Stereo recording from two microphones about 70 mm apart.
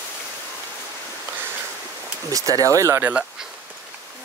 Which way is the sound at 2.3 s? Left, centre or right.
Right.